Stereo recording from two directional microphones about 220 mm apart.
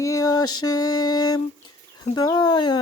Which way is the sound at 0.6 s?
15° left (ahead or behind).